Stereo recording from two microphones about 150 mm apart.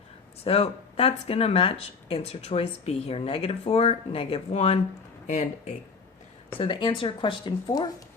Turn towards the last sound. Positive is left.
turn(degrees=30)  # may be behind; listen again after turning